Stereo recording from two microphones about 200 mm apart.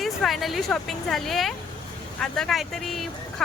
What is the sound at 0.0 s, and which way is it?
Speech, centre (ahead or behind).